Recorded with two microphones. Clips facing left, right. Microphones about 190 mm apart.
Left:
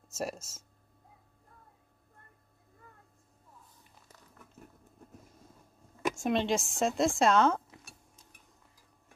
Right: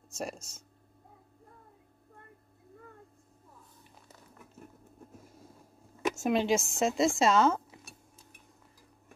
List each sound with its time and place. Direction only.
0.1 s a woman's voice: 5° left (ahead or behind)
6.1 s a woman's voice: 5° right (ahead or behind)